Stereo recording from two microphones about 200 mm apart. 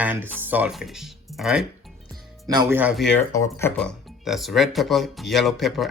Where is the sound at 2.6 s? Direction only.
10° right (ahead or behind).